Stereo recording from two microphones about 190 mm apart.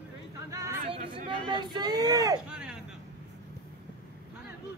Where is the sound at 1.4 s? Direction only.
25° right (ahead or behind).